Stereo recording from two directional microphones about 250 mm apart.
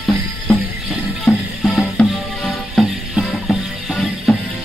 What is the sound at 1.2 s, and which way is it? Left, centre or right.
Music, centre.